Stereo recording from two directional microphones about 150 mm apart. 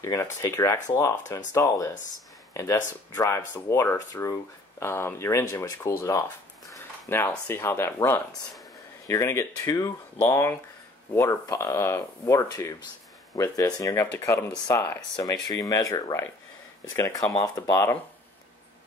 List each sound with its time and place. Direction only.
0.0 s speech: 20° left (ahead or behind)